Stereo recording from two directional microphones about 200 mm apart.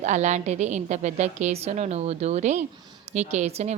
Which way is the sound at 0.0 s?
35° right (ahead or behind).